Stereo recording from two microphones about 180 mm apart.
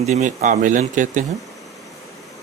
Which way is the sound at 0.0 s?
40° right (ahead or behind).